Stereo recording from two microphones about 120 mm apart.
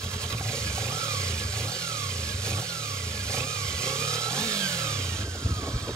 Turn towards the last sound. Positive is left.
turn(degrees=-25)  # may be behind; listen again after turning